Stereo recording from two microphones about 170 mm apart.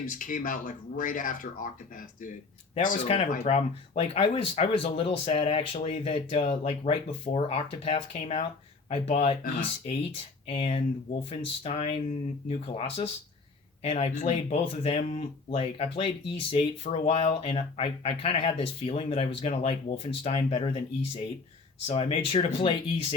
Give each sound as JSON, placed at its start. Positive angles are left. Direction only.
{"t": 0.0, "sound": "speech", "side_deg": 50}
{"t": 2.7, "sound": "speech", "side_deg": 50}
{"t": 3.0, "sound": "speech", "side_deg": 35}
{"t": 10.4, "sound": "speech", "side_deg": 35}